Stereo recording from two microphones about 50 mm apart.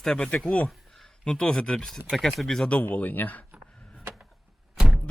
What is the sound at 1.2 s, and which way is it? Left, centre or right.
Speech, centre.